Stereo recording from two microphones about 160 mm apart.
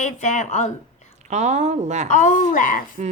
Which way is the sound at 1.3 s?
45° right (ahead or behind).